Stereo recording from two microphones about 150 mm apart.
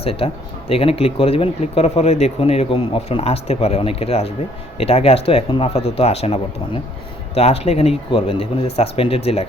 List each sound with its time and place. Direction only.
0.0 s speech: 40° left (ahead or behind)